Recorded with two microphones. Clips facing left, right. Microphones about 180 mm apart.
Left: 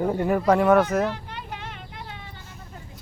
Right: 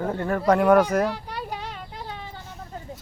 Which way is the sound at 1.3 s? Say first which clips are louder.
Right 4 dB; 35° right (ahead or behind).